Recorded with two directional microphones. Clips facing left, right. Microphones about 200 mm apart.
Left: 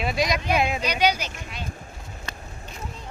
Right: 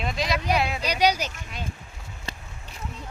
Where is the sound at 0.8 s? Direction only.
35° right (ahead or behind).